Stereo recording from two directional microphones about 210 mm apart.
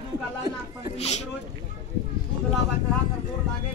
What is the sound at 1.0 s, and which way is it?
Speech, 30° left (ahead or behind).